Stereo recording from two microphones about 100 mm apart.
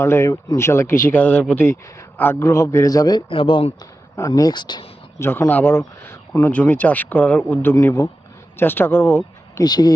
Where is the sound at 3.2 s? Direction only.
60° left (ahead or behind).